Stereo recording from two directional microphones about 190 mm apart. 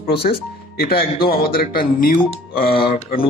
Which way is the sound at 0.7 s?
50° left (ahead or behind).